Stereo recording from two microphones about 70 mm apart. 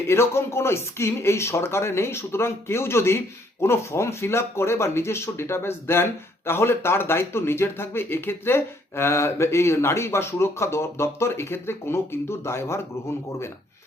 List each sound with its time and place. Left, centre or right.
0.1 s speech: left